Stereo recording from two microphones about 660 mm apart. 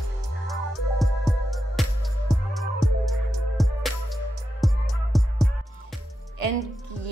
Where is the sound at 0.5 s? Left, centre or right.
Centre.